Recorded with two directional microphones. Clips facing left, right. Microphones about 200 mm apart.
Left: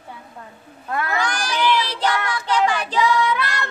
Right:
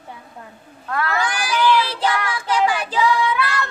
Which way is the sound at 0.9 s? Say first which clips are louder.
Right 1 dB; 20° left (ahead or behind).